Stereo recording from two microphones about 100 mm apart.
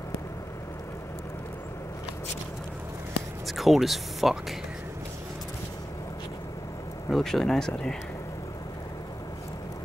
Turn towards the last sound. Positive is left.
turn(degrees=5)  # may be behind; listen again after turning